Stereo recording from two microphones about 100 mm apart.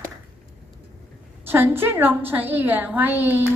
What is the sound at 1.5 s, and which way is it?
A woman's voice, 20° right (ahead or behind).